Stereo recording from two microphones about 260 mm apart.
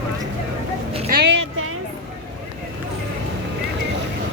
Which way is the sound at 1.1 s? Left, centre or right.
Right.